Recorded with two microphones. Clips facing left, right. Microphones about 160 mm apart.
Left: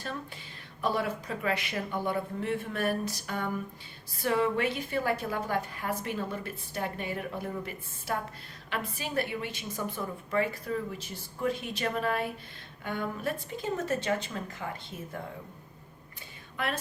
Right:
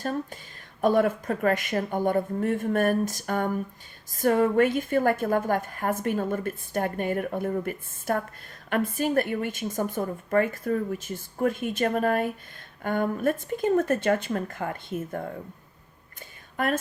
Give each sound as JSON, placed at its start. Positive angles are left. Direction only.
{"t": 0.0, "sound": "a woman's voice", "side_deg": -45}
{"t": 16.6, "sound": "a woman's voice", "side_deg": -45}